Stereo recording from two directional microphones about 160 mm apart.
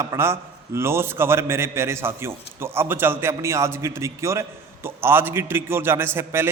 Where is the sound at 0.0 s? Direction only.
15° right (ahead or behind).